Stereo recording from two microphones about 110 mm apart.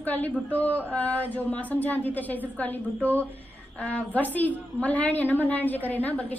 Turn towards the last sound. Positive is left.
turn(degrees=15)  # may be behind; listen again after turning